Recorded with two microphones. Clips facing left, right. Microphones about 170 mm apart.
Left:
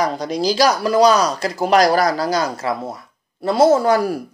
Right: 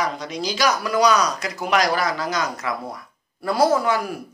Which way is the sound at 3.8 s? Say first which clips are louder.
Left 6 dB; 35° left (ahead or behind).